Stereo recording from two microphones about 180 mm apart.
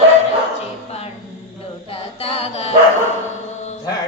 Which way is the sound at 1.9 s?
30° left (ahead or behind).